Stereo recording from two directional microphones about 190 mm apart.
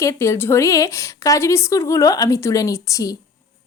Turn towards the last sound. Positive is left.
turn(degrees=15)  # may be behind; listen again after turning